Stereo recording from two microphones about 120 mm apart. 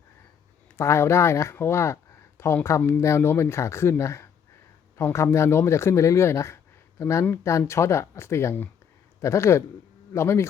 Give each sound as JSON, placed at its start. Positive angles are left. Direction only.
{"t": 0.8, "sound": "speech", "side_deg": 20}